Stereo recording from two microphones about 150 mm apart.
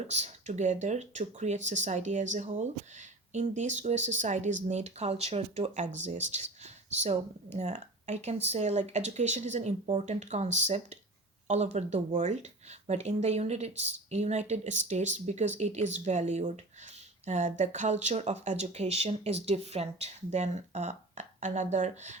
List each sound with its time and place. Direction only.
0.1 s speech: 50° right (ahead or behind)